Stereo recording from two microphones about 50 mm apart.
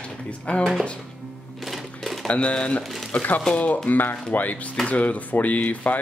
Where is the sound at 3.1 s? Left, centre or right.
Left.